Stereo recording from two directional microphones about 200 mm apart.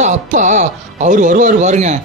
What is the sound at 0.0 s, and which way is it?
Speech, 35° right (ahead or behind).